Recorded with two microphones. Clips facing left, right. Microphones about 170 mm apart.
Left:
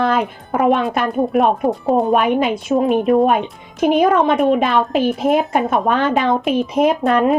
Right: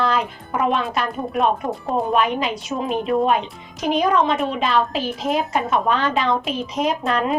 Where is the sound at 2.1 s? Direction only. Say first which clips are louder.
Left 5 dB; 50° left (ahead or behind).